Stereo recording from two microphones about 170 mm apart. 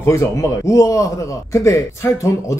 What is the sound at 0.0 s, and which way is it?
A man's voice, 15° left (ahead or behind).